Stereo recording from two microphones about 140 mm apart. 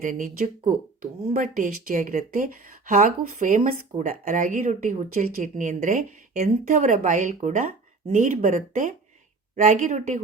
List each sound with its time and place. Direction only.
0.0 s speech: 70° right (ahead or behind)
1.3 s speech: 70° right (ahead or behind)